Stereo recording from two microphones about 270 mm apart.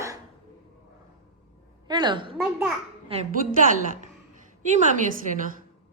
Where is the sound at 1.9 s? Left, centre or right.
Centre.